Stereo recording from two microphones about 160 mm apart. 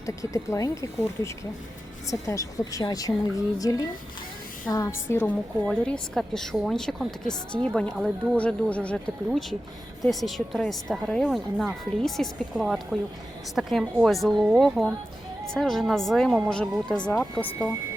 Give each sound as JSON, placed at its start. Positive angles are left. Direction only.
{"t": 0.0, "sound": "a woman's voice", "side_deg": 20}
{"t": 5.6, "sound": "speech", "side_deg": 5}